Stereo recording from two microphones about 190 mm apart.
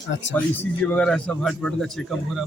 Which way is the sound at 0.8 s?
5° left (ahead or behind).